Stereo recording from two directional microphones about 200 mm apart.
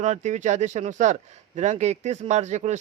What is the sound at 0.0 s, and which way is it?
Speech, 35° right (ahead or behind).